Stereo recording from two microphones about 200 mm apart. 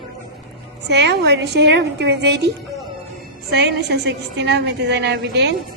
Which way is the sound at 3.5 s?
60° right (ahead or behind).